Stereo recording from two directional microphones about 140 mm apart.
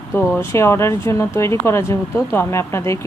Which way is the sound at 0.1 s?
15° left (ahead or behind).